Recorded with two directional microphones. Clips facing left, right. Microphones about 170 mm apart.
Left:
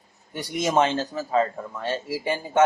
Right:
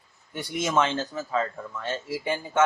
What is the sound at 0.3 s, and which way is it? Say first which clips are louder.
A man's voice: left 3 dB; 40° left (ahead or behind).